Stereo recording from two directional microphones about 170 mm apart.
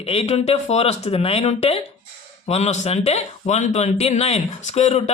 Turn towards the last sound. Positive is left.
turn(degrees=40)  # may be behind; listen again after turning